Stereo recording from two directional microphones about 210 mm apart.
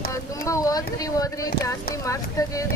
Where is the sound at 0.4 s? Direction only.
15° left (ahead or behind).